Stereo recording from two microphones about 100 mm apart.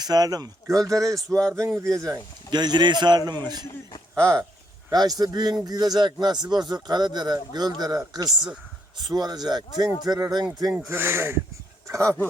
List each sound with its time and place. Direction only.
0.0 s speech: 40° right (ahead or behind)
1.3 s speech: 10° left (ahead or behind)
2.5 s a man's voice: 45° right (ahead or behind)
4.1 s speech: 5° left (ahead or behind)
4.9 s a man's voice: 40° right (ahead or behind)
10.8 s speech: 25° right (ahead or behind)